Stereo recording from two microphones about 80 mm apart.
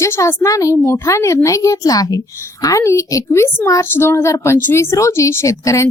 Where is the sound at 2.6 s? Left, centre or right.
Left.